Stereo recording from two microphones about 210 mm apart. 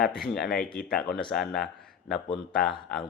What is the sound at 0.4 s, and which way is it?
Speech, 45° left (ahead or behind).